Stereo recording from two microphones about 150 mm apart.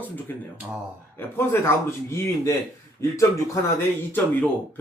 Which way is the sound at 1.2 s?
15° left (ahead or behind).